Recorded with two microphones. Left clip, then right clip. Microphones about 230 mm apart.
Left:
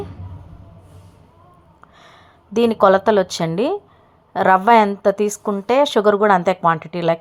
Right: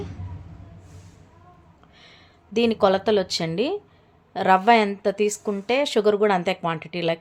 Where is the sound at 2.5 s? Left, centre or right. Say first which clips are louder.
Left 6 dB; centre.